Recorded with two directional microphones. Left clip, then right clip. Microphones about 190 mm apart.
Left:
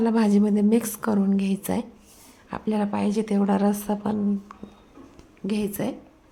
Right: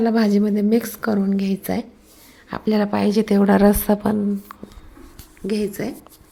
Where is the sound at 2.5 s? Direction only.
15° right (ahead or behind).